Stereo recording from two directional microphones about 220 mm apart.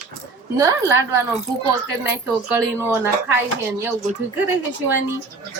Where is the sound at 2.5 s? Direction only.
10° right (ahead or behind).